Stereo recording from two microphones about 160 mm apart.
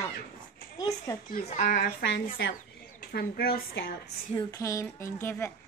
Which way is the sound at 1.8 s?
75° left (ahead or behind).